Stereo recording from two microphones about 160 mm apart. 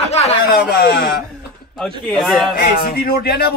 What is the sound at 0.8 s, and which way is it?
Speech, 90° left.